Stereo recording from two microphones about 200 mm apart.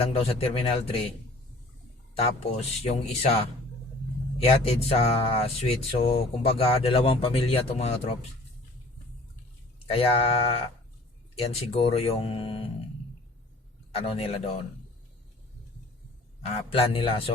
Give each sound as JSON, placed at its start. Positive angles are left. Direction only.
{"t": 0.0, "sound": "speech", "side_deg": 30}
{"t": 2.1, "sound": "speech", "side_deg": 30}
{"t": 4.4, "sound": "speech", "side_deg": 30}
{"t": 9.8, "sound": "speech", "side_deg": 30}
{"t": 13.9, "sound": "speech", "side_deg": 30}
{"t": 16.7, "sound": "speech", "side_deg": 30}